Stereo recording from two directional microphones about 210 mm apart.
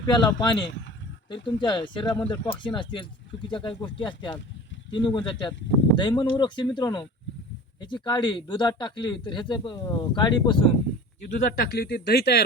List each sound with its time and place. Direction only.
0.0 s speech: 20° left (ahead or behind)
11.2 s speech: 45° left (ahead or behind)